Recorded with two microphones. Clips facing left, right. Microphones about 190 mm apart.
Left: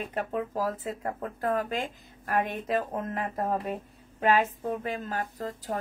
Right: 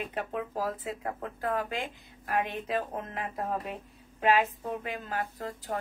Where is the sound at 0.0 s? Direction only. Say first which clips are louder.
Left 3 dB; 40° left (ahead or behind).